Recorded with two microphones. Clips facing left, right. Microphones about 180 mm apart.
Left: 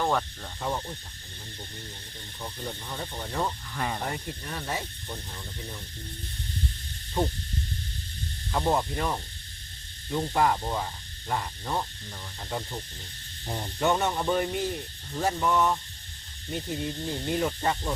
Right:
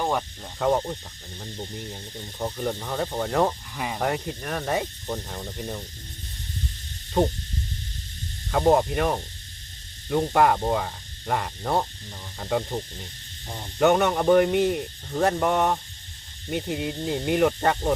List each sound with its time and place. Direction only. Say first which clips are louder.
0.0 s speech: right 1 dB; 15° right (ahead or behind)
0.6 s speech: right 9 dB; 65° right (ahead or behind)
2.4 s speech: right 9 dB; 65° right (ahead or behind)
8.5 s speech: right 7 dB; 65° right (ahead or behind)